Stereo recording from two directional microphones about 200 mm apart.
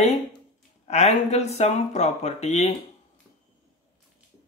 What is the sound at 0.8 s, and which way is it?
Speech, 35° left (ahead or behind).